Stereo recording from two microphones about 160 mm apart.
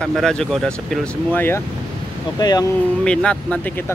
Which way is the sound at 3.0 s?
5° left (ahead or behind).